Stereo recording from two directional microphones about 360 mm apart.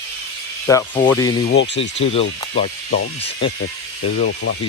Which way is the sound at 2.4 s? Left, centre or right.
Centre.